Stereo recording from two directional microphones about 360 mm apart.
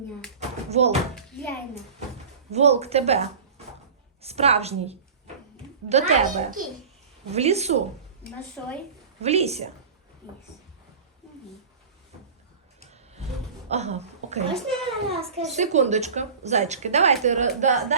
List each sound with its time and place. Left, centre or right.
0.3 s tap: centre
1.1 s a sound: centre
2.5 s a woman's voice: centre
9.2 s a woman's voice: centre
12.8 s a sound: centre
13.7 s a woman's voice: centre